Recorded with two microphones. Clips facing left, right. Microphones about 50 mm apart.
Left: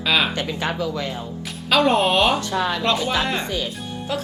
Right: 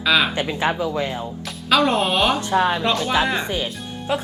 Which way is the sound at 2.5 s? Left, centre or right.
Right.